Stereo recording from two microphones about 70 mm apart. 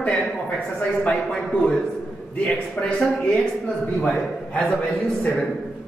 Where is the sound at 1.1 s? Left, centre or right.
Centre.